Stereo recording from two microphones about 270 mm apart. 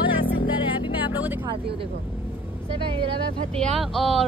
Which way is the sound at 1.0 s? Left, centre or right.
Centre.